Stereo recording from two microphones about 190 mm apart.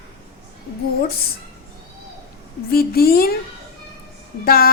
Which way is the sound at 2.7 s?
50° left (ahead or behind).